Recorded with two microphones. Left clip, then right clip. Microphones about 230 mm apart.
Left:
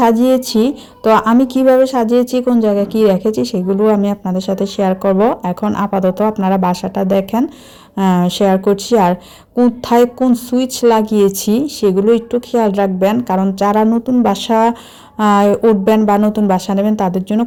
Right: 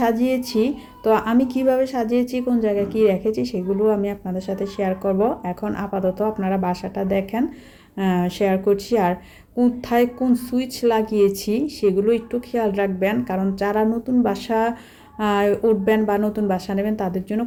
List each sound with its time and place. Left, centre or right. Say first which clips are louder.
0.0 s a woman's voice: left 9 dB; left